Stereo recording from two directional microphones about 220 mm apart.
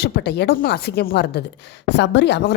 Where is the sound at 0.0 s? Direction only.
50° left (ahead or behind).